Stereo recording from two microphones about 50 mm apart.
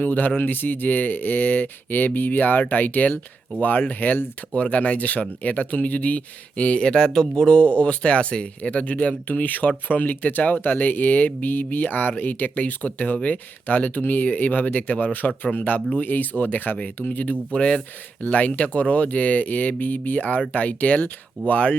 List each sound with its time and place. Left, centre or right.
0.0 s speech: left